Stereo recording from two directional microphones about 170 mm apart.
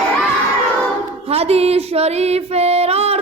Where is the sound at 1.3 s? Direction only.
35° right (ahead or behind).